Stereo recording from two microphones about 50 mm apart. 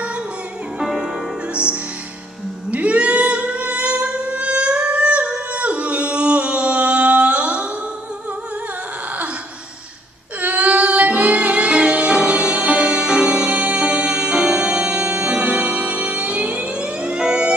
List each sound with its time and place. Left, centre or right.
0.7 s music: centre
2.7 s music: right
10.4 s music: right